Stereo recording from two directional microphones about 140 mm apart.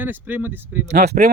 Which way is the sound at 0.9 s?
90° right.